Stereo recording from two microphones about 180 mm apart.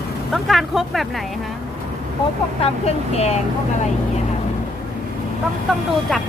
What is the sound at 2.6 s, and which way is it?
Speech, 35° left (ahead or behind).